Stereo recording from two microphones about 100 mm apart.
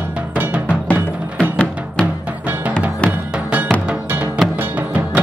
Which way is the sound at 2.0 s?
15° right (ahead or behind).